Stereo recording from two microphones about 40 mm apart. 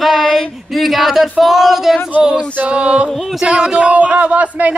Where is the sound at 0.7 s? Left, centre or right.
Centre.